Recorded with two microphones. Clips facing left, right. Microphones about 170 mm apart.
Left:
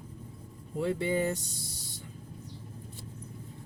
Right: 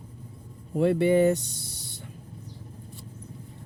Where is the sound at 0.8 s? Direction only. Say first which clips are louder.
Right 9 dB; 65° right (ahead or behind).